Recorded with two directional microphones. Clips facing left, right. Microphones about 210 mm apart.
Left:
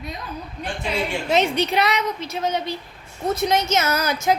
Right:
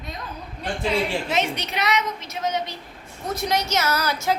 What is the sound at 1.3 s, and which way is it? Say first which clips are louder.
A woman's voice: left 6 dB; 30° left (ahead or behind).